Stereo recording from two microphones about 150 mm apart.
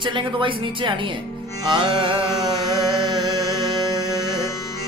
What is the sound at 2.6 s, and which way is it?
Music, 30° right (ahead or behind).